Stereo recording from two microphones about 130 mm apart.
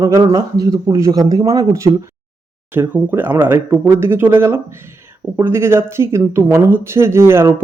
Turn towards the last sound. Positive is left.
turn(degrees=-20)  # may be behind; listen again after turning